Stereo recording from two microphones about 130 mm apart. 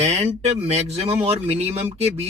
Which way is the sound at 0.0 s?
55° right (ahead or behind).